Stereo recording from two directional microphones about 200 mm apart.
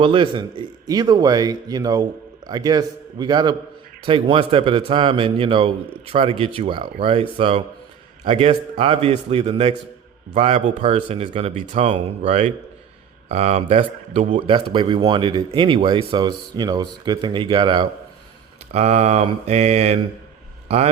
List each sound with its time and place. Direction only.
0.0 s a man's voice: 25° right (ahead or behind)